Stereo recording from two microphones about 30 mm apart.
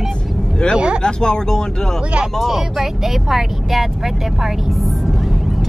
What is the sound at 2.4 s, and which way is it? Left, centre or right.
Speech, centre.